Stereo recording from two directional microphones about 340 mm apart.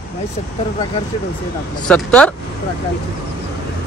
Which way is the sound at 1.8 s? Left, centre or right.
Centre.